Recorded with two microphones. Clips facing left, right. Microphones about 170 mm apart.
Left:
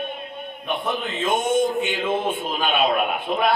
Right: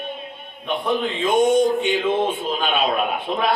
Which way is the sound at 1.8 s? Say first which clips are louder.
Right 3 dB; 55° left (ahead or behind).